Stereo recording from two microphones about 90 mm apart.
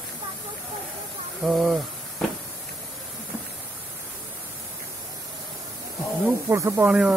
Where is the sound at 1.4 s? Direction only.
Centre (ahead or behind).